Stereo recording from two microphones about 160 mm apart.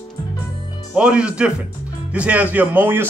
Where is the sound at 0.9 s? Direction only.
5° right (ahead or behind).